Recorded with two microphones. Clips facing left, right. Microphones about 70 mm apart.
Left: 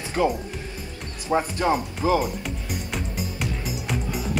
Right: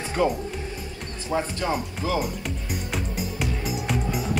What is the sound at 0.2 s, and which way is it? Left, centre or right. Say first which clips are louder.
Speech: left 1 dB; centre.